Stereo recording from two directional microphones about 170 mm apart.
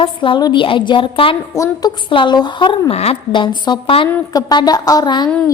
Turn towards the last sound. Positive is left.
turn(degrees=25)  # may be behind; listen again after turning